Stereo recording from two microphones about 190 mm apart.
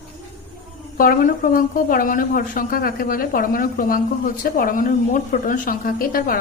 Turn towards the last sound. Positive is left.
turn(degrees=50)  # may be behind; listen again after turning